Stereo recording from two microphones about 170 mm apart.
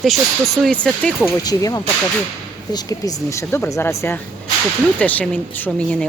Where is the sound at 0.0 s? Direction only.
Centre (ahead or behind).